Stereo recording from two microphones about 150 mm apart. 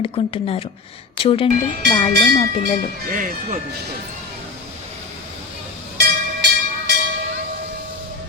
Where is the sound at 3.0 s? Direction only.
65° right (ahead or behind).